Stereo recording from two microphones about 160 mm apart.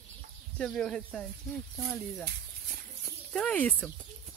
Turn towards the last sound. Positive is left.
turn(degrees=5)  # may be behind; listen again after turning